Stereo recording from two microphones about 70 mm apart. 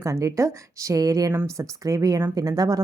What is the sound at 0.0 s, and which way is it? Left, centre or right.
Speech, right.